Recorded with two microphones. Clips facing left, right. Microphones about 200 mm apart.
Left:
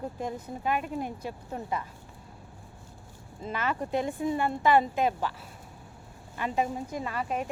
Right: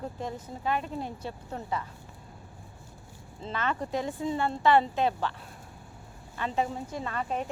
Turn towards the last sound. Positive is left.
turn(degrees=10)  # may be behind; listen again after turning